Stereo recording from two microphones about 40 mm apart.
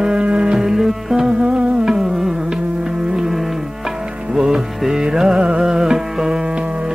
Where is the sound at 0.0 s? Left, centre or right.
Right.